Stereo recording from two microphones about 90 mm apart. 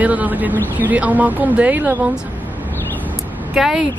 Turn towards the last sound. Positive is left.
turn(degrees=-5)  # may be behind; listen again after turning